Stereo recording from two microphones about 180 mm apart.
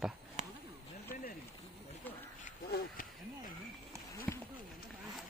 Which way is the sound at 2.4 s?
50° left (ahead or behind).